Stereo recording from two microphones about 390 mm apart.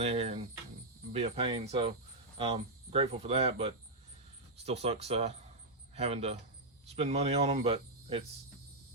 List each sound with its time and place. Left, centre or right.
0.0 s speech: centre
2.9 s speech: centre